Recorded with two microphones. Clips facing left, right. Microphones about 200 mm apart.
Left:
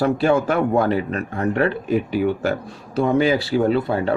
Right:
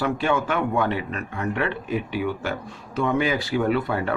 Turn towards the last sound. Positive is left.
turn(degrees=30)  # may be behind; listen again after turning